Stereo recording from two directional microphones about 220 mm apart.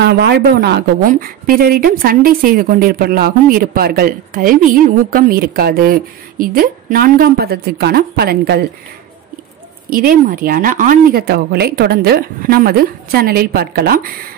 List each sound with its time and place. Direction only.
0.0 s a woman's voice: 50° right (ahead or behind)
9.8 s a woman's voice: 40° right (ahead or behind)